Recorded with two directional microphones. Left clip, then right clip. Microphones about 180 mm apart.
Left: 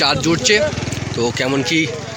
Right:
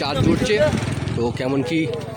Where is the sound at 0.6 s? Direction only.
40° left (ahead or behind).